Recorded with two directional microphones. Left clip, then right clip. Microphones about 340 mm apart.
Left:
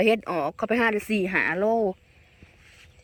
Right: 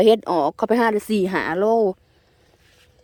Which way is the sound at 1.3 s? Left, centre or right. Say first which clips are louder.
Right 3 dB; centre.